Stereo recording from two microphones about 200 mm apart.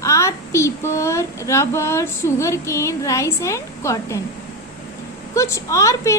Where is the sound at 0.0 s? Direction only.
15° left (ahead or behind).